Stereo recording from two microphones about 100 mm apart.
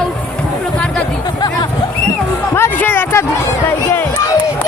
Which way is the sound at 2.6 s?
20° left (ahead or behind).